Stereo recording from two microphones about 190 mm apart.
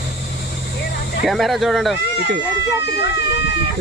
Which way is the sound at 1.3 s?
Centre (ahead or behind).